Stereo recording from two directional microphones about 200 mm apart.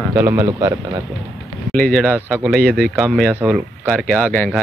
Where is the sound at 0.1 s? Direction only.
15° right (ahead or behind).